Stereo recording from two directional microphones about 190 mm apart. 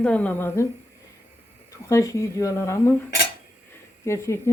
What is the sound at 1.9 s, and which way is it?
Speech, 15° left (ahead or behind).